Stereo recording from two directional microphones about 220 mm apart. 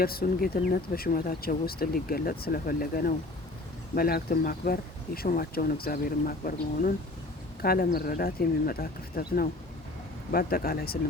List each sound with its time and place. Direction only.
0.0 s speech: 45° left (ahead or behind)